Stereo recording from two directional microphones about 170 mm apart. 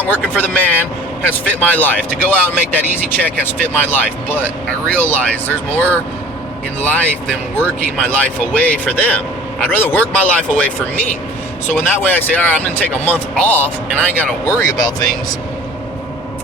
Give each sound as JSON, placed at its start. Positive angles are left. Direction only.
{"t": 0.0, "sound": "speech", "side_deg": 10}